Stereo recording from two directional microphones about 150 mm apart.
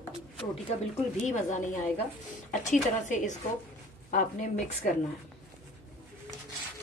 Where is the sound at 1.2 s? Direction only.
55° left (ahead or behind).